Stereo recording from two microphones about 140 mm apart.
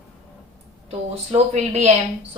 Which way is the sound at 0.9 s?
45° right (ahead or behind).